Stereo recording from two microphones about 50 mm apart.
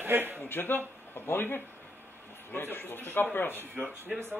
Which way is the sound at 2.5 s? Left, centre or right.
Left.